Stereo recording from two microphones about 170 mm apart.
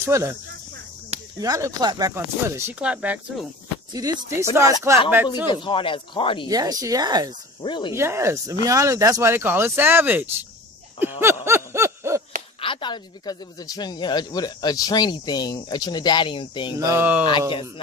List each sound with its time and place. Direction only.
0.0 s speech: 15° right (ahead or behind)
1.4 s speech: 20° right (ahead or behind)
3.9 s speech: 20° right (ahead or behind)
5.3 s speech: 30° left (ahead or behind)
6.5 s speech: 20° right (ahead or behind)
7.6 s speech: 30° left (ahead or behind)
7.9 s speech: 15° right (ahead or behind)
11.4 s a sound: 15° right (ahead or behind)
12.5 s speech: 30° left (ahead or behind)
16.8 s speech: 10° right (ahead or behind)